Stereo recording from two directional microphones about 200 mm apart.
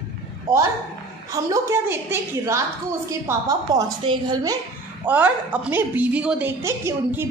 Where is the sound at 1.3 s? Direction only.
15° right (ahead or behind).